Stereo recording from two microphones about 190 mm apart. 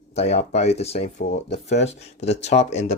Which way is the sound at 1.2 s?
60° left (ahead or behind).